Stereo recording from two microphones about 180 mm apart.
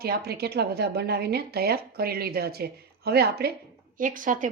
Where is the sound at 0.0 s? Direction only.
60° right (ahead or behind).